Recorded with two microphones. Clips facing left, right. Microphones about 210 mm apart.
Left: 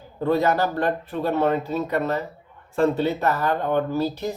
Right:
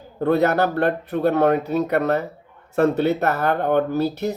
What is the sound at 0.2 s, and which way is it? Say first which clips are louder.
Speech: right 3 dB; 60° right (ahead or behind).